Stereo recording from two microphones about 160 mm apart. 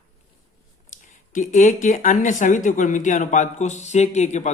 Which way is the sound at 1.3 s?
50° left (ahead or behind).